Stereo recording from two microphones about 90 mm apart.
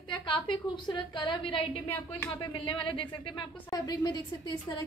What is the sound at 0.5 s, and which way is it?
A woman's voice, 60° left (ahead or behind).